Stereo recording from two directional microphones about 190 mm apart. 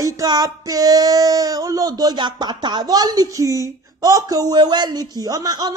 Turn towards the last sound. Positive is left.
turn(degrees=-20)  # may be behind; listen again after turning